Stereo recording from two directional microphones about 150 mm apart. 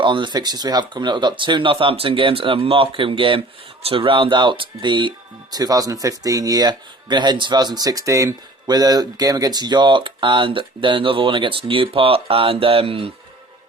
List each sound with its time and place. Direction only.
0.0 s speech: 30° right (ahead or behind)